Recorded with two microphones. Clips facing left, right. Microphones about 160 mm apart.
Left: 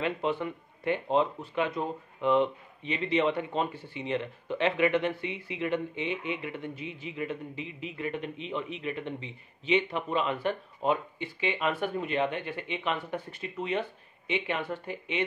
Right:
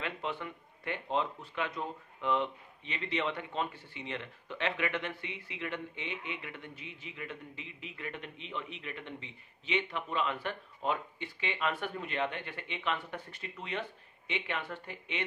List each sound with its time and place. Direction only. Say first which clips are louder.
0.0 s speech: left 8 dB; 20° left (ahead or behind)